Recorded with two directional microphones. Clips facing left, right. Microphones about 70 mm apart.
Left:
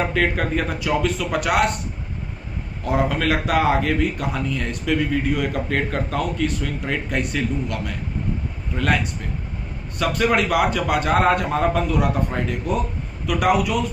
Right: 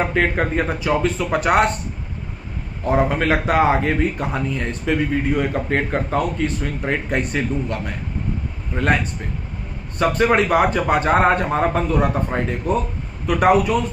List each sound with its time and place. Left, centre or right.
0.1 s speech: right
2.9 s speech: right